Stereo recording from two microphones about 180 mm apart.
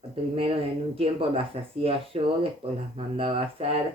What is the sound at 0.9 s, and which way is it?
Speech, 30° right (ahead or behind).